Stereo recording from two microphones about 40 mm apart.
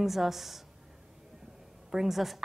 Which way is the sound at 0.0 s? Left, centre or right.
Centre.